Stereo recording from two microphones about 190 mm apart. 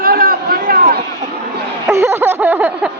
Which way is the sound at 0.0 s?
50° right (ahead or behind).